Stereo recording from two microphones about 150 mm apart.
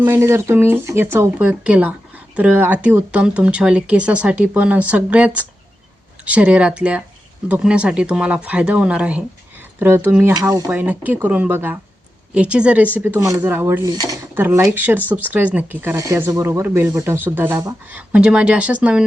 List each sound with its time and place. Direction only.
0.0 s speech: 20° right (ahead or behind)
13.9 s speech: 30° right (ahead or behind)
14.3 s speech: 15° right (ahead or behind)